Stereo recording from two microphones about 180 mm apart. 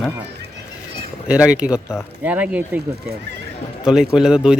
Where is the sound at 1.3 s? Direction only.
5° right (ahead or behind).